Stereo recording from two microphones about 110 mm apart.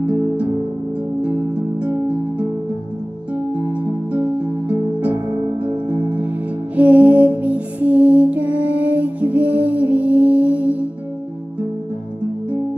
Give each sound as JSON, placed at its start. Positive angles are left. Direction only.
{"t": 0.0, "sound": "music", "side_deg": -15}
{"t": 3.5, "sound": "music", "side_deg": -10}